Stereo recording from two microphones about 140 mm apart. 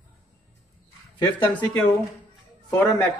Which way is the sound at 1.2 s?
15° left (ahead or behind).